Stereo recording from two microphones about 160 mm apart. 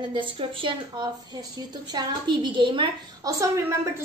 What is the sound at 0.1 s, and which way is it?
A woman's voice, 30° right (ahead or behind).